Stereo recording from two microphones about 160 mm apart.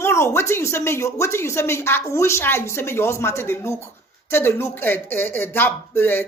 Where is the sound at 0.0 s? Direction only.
15° left (ahead or behind).